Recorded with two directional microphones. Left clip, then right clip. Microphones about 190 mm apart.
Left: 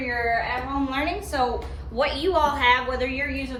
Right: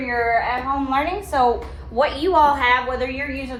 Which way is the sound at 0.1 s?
15° right (ahead or behind).